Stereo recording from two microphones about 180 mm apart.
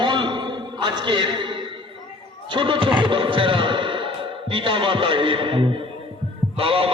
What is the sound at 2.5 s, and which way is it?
A man's voice, 30° right (ahead or behind).